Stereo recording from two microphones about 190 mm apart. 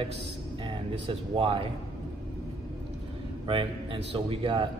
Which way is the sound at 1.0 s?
30° right (ahead or behind).